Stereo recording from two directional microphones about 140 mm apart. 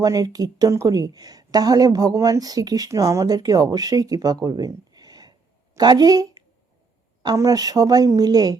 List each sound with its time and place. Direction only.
0.0 s a woman's voice: 25° right (ahead or behind)